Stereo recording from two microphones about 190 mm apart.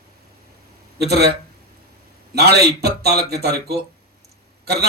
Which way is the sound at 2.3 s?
55° right (ahead or behind).